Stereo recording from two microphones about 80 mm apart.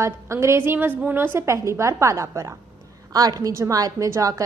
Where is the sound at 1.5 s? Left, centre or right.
Right.